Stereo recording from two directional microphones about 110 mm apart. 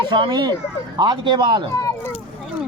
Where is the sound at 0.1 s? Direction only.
45° right (ahead or behind).